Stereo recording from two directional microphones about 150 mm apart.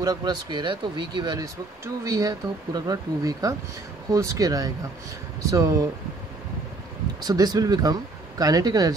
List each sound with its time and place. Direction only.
0.0 s speech: 25° right (ahead or behind)
7.2 s speech: 25° right (ahead or behind)